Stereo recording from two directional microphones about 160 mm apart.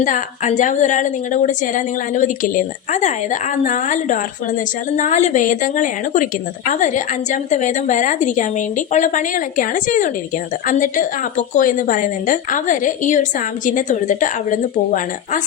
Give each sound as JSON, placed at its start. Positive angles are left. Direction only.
{"t": 0.0, "sound": "a woman's voice", "side_deg": 55}